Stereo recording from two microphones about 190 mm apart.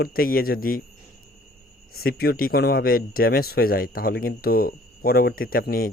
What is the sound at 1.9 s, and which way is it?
Speech, 55° left (ahead or behind).